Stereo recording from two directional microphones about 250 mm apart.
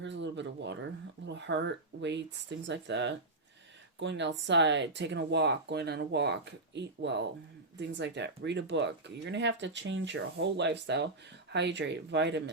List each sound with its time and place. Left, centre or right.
0.0 s speech: right